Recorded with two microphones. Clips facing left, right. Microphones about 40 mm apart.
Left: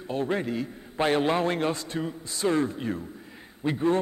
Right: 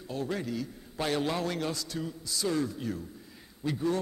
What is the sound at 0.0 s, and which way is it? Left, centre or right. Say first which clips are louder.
A man's voice: left 6 dB; left.